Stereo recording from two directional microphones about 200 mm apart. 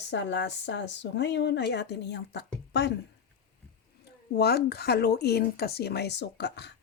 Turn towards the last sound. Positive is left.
turn(degrees=60)  # may be behind; listen again after turning